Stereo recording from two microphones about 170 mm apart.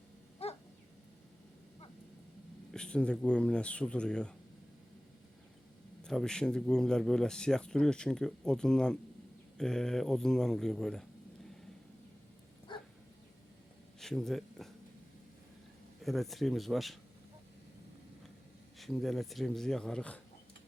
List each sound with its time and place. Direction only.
0.4 s dog: 35° left (ahead or behind)
2.7 s speech: 5° left (ahead or behind)
6.0 s speech: 5° left (ahead or behind)
12.7 s dog: 30° left (ahead or behind)
14.0 s speech: centre (ahead or behind)
16.0 s speech: centre (ahead or behind)
18.8 s speech: centre (ahead or behind)